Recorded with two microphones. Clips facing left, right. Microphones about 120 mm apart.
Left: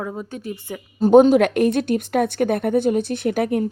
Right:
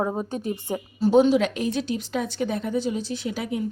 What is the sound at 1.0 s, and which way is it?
Speech, 50° left (ahead or behind).